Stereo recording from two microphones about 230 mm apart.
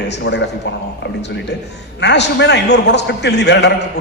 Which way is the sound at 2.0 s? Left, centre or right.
Left.